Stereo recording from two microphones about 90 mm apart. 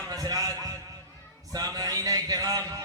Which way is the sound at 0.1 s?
45° right (ahead or behind).